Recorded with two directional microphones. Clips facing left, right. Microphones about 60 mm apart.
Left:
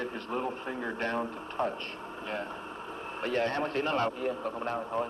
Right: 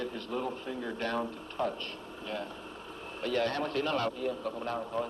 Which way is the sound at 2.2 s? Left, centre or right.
Left.